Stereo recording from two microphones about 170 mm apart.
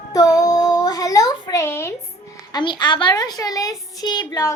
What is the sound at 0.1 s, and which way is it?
Child singing, 20° left (ahead or behind).